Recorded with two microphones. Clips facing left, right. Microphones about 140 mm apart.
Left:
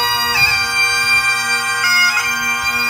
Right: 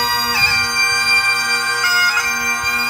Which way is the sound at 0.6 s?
20° right (ahead or behind).